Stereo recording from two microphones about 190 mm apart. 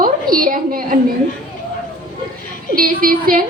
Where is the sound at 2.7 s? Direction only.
50° right (ahead or behind).